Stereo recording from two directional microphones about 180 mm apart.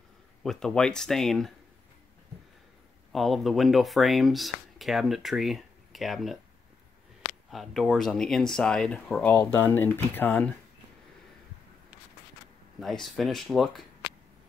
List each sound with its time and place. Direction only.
0.4 s speech: 5° left (ahead or behind)
3.1 s speech: centre (ahead or behind)
7.5 s speech: centre (ahead or behind)
12.8 s speech: centre (ahead or behind)